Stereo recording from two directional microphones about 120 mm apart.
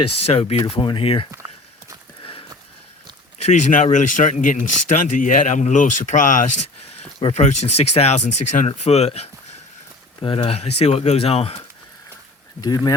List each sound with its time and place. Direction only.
0.0 s speech: 60° left (ahead or behind)
3.3 s speech: 75° left (ahead or behind); by 6.7 s 90° left
7.3 s speech: 65° left (ahead or behind)
10.2 s speech: 50° left (ahead or behind)
12.6 s speech: 35° left (ahead or behind)